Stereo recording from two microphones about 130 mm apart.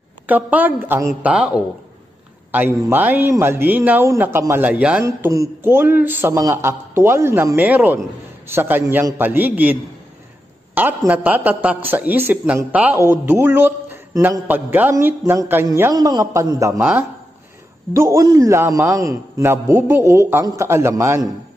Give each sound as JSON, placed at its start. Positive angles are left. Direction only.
{"t": 0.3, "sound": "speech", "side_deg": -15}
{"t": 5.0, "sound": "speech", "side_deg": -20}
{"t": 15.9, "sound": "a man's voice", "side_deg": -30}
{"t": 17.9, "sound": "a man's voice", "side_deg": -25}